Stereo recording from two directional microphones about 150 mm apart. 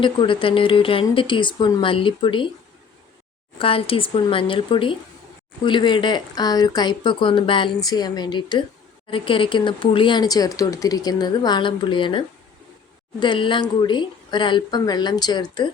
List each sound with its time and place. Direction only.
0.0 s speech: 35° left (ahead or behind)
3.6 s speech: 35° left (ahead or behind)